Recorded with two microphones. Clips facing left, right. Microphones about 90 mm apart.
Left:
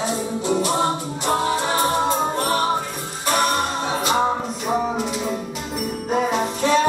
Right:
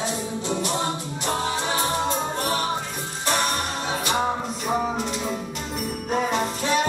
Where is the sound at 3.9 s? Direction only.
25° left (ahead or behind).